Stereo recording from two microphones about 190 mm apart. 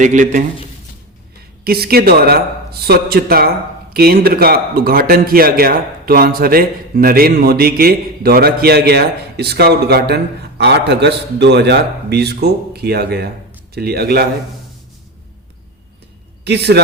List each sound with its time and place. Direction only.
0.0 s a man's voice: 40° right (ahead or behind)
1.6 s a man's voice: 55° right (ahead or behind)
16.4 s a man's voice: 60° right (ahead or behind)